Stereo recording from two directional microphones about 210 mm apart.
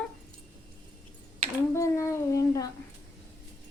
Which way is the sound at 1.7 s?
15° left (ahead or behind).